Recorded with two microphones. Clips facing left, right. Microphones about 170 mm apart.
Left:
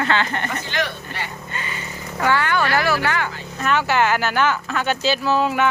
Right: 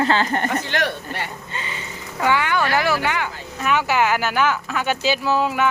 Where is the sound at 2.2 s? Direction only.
15° right (ahead or behind).